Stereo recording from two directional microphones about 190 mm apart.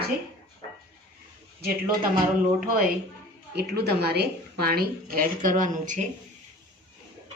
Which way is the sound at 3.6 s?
60° right (ahead or behind).